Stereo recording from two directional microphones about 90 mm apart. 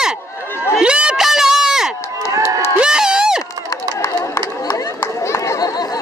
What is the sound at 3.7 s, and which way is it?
Run, 35° left (ahead or behind).